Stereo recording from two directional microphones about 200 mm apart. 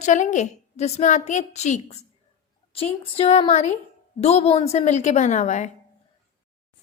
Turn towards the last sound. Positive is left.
turn(degrees=35)  # may be behind; listen again after turning